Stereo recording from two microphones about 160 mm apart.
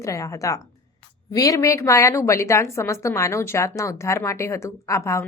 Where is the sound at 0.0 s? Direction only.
20° left (ahead or behind).